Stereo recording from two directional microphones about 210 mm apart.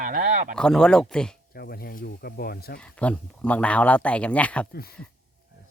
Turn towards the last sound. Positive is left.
turn(degrees=45)  # may be behind; listen again after turning